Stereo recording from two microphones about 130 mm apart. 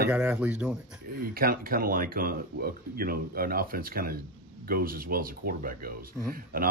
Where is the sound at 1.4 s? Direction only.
90° right.